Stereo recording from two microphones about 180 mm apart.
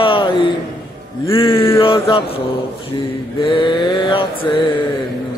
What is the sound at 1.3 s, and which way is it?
Speech, 30° left (ahead or behind).